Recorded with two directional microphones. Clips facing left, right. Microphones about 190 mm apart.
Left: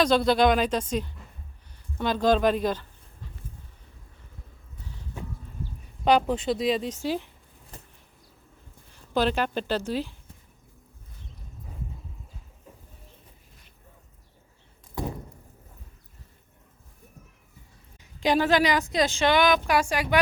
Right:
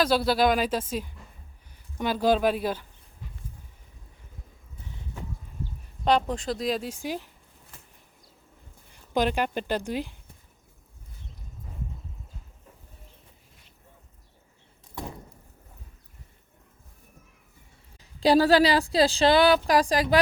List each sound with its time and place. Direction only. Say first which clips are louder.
0.0 s speech: left 2 dB; 5° right (ahead or behind)
6.1 s speech: left 2 dB; 5° left (ahead or behind); by 7.2 s 10° right (ahead or behind)
9.1 s speech: even; 15° right (ahead or behind)
18.2 s a woman's voice: right 3 dB; 35° right (ahead or behind)